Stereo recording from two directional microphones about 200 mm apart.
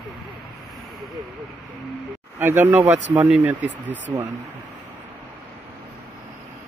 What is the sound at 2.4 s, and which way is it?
Speech, 10° right (ahead or behind).